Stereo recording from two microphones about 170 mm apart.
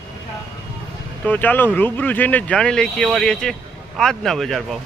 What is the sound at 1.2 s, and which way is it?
Speech, 10° left (ahead or behind).